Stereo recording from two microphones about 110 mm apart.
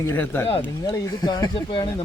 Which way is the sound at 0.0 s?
20° left (ahead or behind).